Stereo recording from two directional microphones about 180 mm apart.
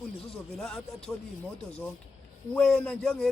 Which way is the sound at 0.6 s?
5° left (ahead or behind).